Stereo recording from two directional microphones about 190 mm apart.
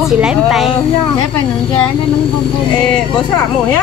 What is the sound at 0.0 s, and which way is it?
Speech, 5° right (ahead or behind).